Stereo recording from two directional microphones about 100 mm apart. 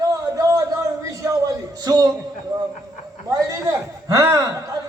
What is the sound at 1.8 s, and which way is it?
Speech, 45° right (ahead or behind).